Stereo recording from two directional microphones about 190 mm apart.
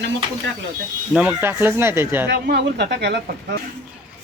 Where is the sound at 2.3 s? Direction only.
60° right (ahead or behind).